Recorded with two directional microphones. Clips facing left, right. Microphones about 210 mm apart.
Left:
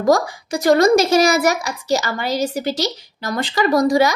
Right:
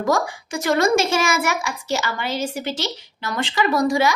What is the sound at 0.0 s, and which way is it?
A woman's voice, 35° left (ahead or behind).